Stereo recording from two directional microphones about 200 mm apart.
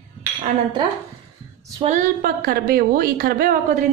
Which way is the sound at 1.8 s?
40° right (ahead or behind).